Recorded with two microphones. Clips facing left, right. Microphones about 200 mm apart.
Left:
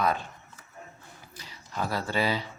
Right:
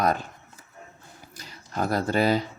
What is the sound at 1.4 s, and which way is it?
Speech, 45° right (ahead or behind).